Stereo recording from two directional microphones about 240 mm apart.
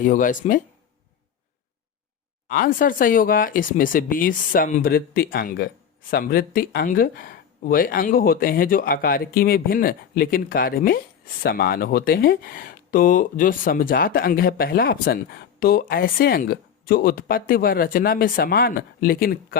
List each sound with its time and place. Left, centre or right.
0.0 s speech: left
2.5 s speech: left